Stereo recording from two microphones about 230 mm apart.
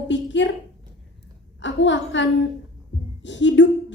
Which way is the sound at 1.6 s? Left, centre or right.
Left.